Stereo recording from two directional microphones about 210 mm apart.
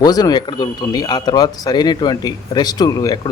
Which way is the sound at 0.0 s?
20° left (ahead or behind).